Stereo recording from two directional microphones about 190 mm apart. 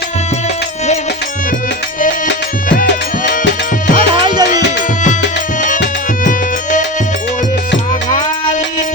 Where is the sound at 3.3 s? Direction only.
45° left (ahead or behind).